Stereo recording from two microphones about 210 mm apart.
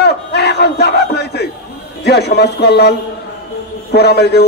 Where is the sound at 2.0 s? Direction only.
50° left (ahead or behind).